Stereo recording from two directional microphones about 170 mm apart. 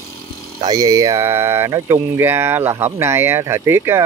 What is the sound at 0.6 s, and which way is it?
Speech, 20° right (ahead or behind).